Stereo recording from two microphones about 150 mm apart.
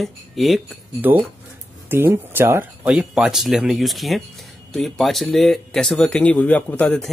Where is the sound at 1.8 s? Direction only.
15° right (ahead or behind).